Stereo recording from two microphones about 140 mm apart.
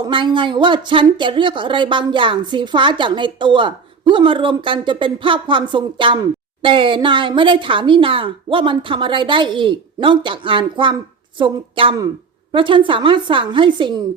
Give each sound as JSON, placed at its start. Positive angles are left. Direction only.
{"t": 0.0, "sound": "a woman's voice", "side_deg": -35}